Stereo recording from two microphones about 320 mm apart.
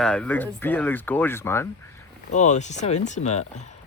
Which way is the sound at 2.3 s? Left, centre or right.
Left.